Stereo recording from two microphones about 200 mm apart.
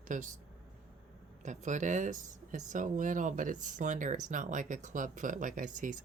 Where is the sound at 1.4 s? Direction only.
35° right (ahead or behind).